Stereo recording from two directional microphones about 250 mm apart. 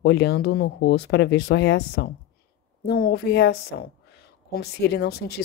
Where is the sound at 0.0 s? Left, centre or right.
Left.